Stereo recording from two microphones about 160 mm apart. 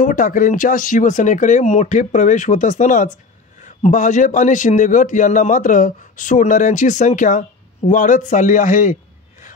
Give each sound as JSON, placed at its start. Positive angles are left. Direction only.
{"t": 0.0, "sound": "a man's voice", "side_deg": 55}